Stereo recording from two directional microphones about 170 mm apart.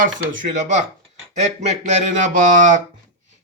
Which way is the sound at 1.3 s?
40° right (ahead or behind).